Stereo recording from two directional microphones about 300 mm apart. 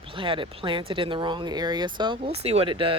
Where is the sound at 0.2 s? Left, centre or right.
Centre.